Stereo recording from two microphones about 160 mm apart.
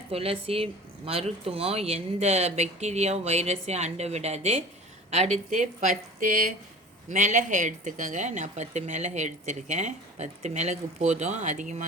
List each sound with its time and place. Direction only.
0.1 s speech: 35° right (ahead or behind)